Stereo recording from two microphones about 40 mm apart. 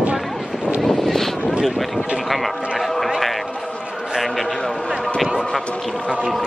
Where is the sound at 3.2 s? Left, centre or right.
Centre.